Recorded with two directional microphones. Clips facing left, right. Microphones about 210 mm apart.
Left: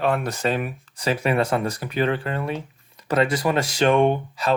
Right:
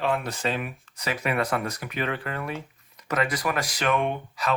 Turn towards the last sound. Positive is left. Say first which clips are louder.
# left 6 dB
turn(degrees=30)  # may be behind; listen again after turning